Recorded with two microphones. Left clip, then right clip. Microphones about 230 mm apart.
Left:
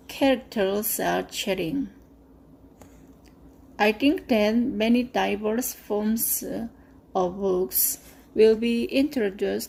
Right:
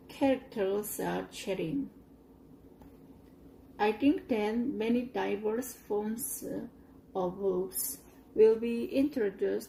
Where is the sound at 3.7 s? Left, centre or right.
Left.